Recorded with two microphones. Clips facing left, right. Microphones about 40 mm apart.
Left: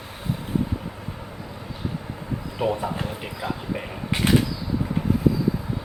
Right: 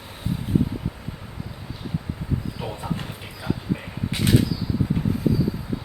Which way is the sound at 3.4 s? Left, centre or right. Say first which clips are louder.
Right 2 dB; centre.